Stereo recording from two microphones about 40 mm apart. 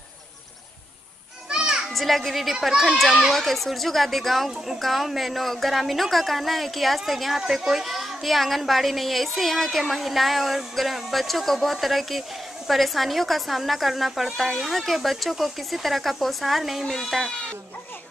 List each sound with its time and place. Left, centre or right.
1.5 s children playing: centre
2.0 s a woman's voice: centre
17.1 s speech: centre